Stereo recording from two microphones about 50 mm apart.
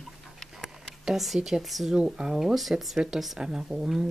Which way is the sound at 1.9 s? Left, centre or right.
Centre.